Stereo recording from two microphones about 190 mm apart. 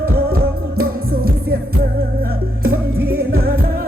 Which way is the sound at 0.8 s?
50° right (ahead or behind).